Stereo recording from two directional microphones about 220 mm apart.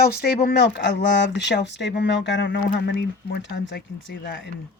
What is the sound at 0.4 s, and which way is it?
Speech, 50° left (ahead or behind).